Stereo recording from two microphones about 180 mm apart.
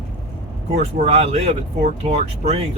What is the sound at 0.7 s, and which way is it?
Speech, 35° right (ahead or behind).